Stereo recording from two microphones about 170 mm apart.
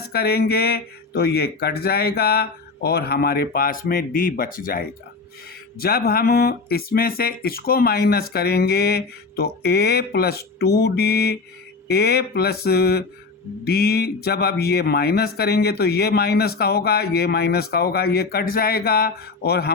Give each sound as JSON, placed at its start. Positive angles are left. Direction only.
{"t": 0.1, "sound": "speech", "side_deg": 65}